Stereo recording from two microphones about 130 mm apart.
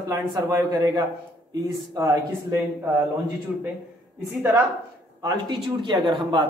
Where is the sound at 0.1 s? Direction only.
25° right (ahead or behind).